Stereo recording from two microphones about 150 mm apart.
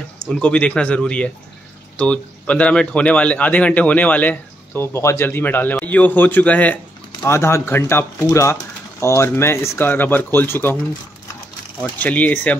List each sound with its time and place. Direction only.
0.3 s speech: 10° left (ahead or behind)
12.0 s speech: 10° left (ahead or behind)